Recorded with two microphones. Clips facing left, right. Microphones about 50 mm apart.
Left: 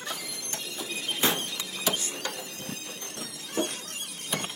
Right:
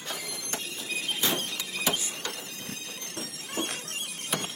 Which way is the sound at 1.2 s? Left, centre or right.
Left.